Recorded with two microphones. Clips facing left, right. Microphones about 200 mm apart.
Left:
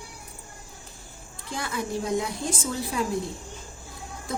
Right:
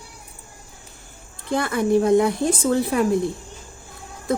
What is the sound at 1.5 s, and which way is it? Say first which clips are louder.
A woman's voice: right 11 dB; 60° right (ahead or behind).